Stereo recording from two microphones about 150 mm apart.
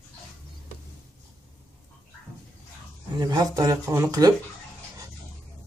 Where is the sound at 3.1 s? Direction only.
25° right (ahead or behind).